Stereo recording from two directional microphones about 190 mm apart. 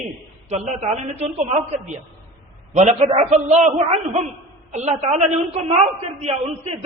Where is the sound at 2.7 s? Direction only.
35° right (ahead or behind).